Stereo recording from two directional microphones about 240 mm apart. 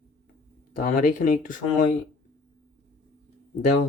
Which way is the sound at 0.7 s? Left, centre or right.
Left.